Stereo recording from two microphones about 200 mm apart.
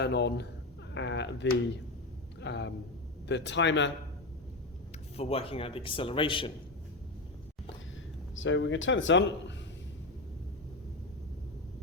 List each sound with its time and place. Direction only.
0.0 s speech: 55° left (ahead or behind)
5.1 s a man's voice: 30° left (ahead or behind)
8.4 s speech: 70° left (ahead or behind)